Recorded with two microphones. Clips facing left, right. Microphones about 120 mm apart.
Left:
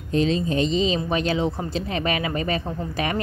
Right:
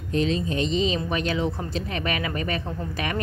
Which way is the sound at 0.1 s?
35° left (ahead or behind).